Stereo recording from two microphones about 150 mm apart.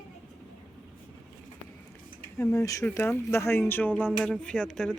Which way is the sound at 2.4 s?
20° left (ahead or behind).